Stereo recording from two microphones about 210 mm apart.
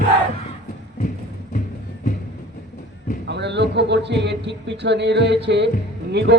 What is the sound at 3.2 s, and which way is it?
Speech, 55° right (ahead or behind).